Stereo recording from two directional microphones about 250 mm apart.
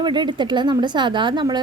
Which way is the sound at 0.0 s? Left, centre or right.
Centre.